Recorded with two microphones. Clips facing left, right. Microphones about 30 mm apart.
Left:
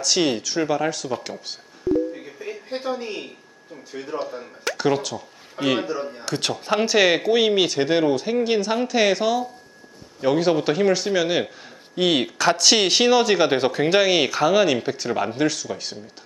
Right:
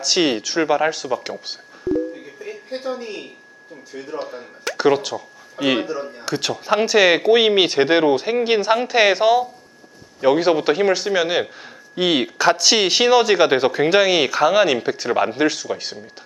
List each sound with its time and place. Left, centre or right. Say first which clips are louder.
0.0 s speech: right 2 dB; centre
2.1 s a sound: even; centre
3.9 s speech: even; centre
4.2 s speech: even; centre
5.9 s speech: right 1 dB; centre
7.2 s speech: right 4 dB; right